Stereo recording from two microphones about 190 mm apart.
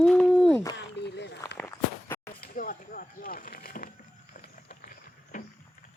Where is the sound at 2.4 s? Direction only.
45° left (ahead or behind).